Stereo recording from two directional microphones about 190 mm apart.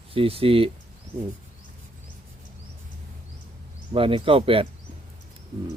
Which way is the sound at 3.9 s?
30° right (ahead or behind).